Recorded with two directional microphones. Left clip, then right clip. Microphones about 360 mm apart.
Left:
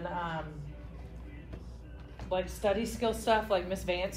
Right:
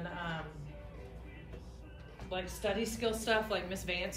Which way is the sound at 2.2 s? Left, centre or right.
Centre.